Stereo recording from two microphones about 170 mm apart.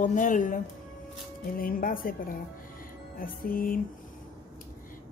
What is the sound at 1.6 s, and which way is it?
Speech, 55° left (ahead or behind).